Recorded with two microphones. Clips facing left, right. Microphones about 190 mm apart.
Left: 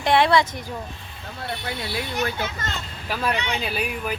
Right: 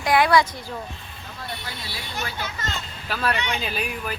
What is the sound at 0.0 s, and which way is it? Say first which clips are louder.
Speech: even; 25° left (ahead or behind).